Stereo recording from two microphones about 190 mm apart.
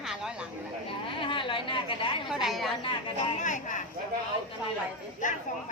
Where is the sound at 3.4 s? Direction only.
40° left (ahead or behind).